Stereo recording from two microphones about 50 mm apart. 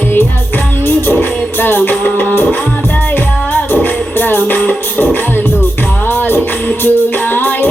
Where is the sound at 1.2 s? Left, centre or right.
Left.